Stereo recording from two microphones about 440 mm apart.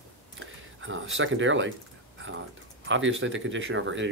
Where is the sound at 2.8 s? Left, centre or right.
Right.